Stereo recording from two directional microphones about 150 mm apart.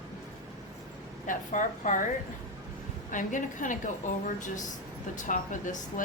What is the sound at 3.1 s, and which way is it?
Speech, 60° left (ahead or behind).